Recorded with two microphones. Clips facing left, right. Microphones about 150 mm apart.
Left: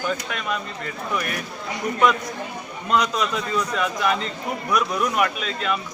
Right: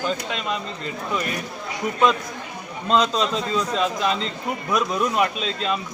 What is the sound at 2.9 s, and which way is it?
Speech, 25° right (ahead or behind).